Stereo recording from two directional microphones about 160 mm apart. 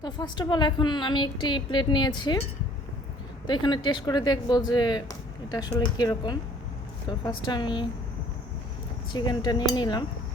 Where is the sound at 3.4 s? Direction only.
30° left (ahead or behind).